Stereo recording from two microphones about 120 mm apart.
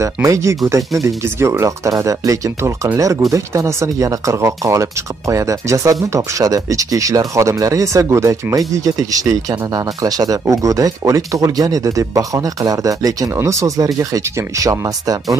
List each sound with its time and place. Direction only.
0.0 s speech: 25° right (ahead or behind)